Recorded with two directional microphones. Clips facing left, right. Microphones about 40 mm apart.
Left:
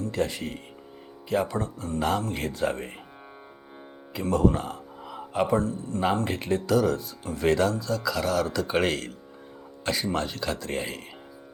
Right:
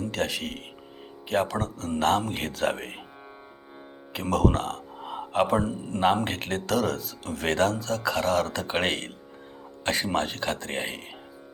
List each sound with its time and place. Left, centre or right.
0.1 s speech: right
1.5 s speech: right
2.0 s speech: right
2.5 s speech: right
4.1 s speech: right
5.1 s speech: right
6.3 s speech: right
7.4 s speech: right
10.8 s speech: right